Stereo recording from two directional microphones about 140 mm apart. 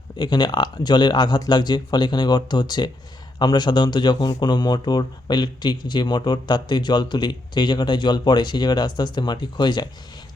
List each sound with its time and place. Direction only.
0.2 s speech: 30° left (ahead or behind)